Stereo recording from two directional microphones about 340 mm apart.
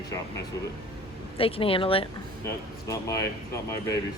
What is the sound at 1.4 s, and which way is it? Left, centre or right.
Speech, centre.